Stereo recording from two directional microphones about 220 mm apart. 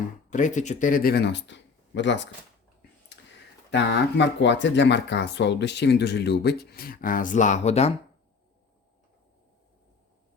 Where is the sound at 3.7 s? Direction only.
55° left (ahead or behind); by 7.9 s 30° left (ahead or behind).